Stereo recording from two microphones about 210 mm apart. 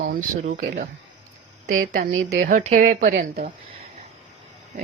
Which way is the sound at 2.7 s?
40° right (ahead or behind).